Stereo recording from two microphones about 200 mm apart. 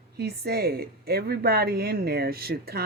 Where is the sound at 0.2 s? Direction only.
55° right (ahead or behind).